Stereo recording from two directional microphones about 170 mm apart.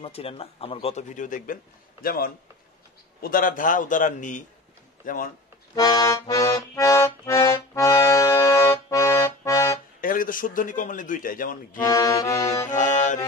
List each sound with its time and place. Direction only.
0.0 s a man's voice: 35° left (ahead or behind); by 5.3 s 55° left (ahead or behind)
5.8 s music: 25° left (ahead or behind)
6.5 s accordion: 15° left (ahead or behind)
9.9 s a man's voice: 55° left (ahead or behind)
11.8 s music: 20° left (ahead or behind)
12.7 s accordion: 45° left (ahead or behind)